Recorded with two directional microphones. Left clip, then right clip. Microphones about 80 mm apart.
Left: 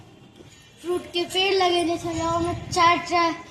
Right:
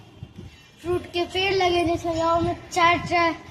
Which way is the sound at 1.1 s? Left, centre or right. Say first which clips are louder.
Left 2 dB; centre.